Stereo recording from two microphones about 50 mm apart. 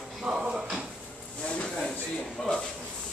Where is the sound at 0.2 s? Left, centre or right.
Right.